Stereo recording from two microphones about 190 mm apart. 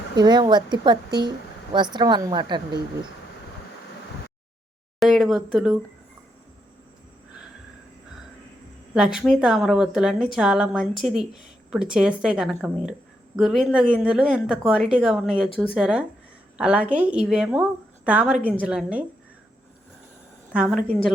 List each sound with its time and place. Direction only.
0.2 s a woman's voice: 20° right (ahead or behind)
4.9 s speech: centre (ahead or behind)
9.1 s a woman's voice: centre (ahead or behind)
20.5 s a woman's voice: 5° right (ahead or behind)